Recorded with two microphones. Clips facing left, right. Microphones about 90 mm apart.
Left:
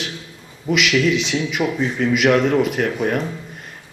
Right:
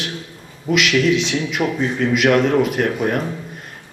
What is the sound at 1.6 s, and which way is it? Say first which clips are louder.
Speech: right 1 dB; 15° right (ahead or behind).